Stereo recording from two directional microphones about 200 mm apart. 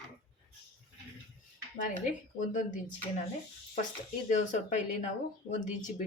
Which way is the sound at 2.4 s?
40° left (ahead or behind).